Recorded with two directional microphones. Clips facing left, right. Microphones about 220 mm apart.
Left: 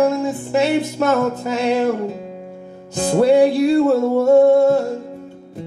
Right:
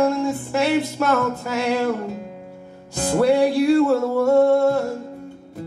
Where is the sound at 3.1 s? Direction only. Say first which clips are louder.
Left 4 dB; 20° left (ahead or behind).